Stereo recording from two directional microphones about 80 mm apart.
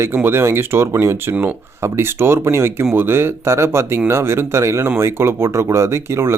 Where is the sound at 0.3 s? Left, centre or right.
Right.